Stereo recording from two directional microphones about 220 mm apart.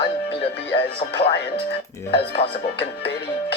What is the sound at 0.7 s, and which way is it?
Speech, 25° left (ahead or behind).